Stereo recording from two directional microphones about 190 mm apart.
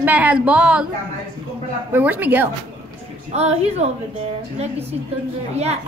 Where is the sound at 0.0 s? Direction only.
10° right (ahead or behind).